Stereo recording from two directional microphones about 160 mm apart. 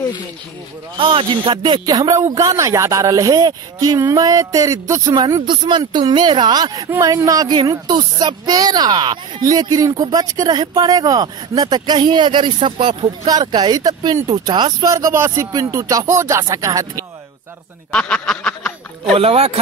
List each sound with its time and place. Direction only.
0.9 s speech: 35° right (ahead or behind)
17.9 s speech: 5° left (ahead or behind)
19.1 s speech: 40° right (ahead or behind)